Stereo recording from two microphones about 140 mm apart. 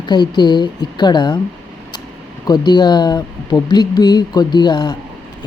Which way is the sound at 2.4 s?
30° left (ahead or behind).